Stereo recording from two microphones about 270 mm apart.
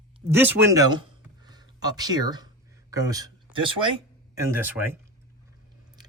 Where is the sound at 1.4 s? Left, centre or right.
Centre.